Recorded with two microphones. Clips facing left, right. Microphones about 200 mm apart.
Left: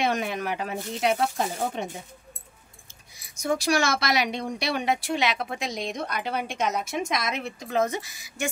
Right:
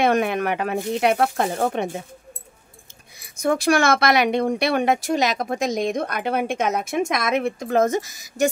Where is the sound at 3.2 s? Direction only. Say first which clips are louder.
Right 5 dB; 55° right (ahead or behind).